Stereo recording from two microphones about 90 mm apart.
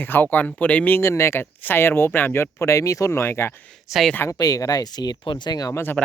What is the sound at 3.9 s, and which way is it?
Speech, centre (ahead or behind).